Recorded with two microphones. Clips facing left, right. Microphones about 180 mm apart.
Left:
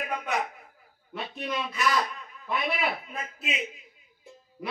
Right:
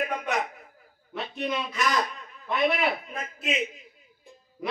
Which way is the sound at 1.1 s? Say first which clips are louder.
Right 3 dB; centre (ahead or behind).